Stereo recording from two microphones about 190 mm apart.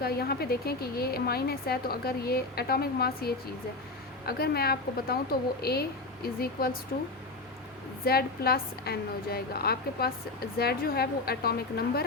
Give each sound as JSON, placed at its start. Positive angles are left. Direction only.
{"t": 0.0, "sound": "speech", "side_deg": 55}
{"t": 8.0, "sound": "speech", "side_deg": 55}